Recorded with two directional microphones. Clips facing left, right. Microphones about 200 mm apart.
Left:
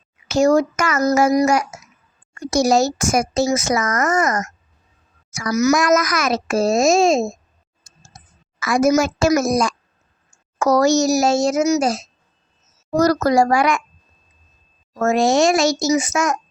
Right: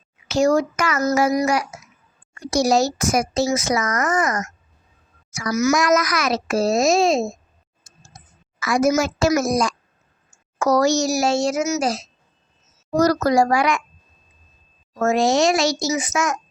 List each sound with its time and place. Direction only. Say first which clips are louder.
0.3 s speech: left 3 dB; 45° left (ahead or behind)
8.6 s speech: left 2 dB; 50° left (ahead or behind)
15.0 s speech: left 2 dB; 50° left (ahead or behind)